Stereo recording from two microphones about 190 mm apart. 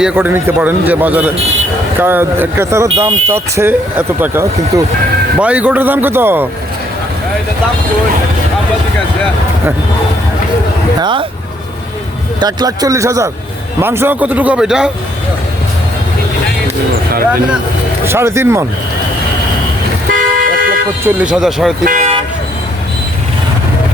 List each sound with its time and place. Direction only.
0.0 s speech: 10° right (ahead or behind)
11.0 s a man's voice: 25° right (ahead or behind)
12.4 s a man's voice: 20° right (ahead or behind); by 14.8 s 5° right (ahead or behind)
18.0 s speech: 15° right (ahead or behind)
20.1 s toot: 50° right (ahead or behind)
21.0 s speech: 5° right (ahead or behind)
21.8 s speech: 45° right (ahead or behind)